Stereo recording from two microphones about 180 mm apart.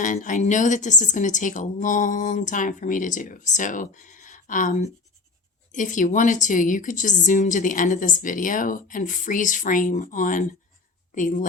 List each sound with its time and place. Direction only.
0.0 s a woman's voice: 45° left (ahead or behind)